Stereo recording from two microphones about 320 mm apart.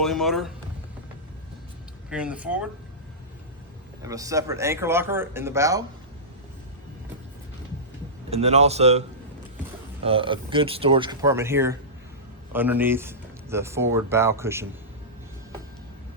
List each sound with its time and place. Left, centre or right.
0.0 s speech: centre
2.0 s speech: centre
4.0 s speech: centre
8.3 s a man's voice: centre